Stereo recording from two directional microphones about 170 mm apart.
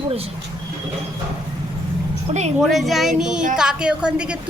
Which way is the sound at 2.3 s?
35° right (ahead or behind).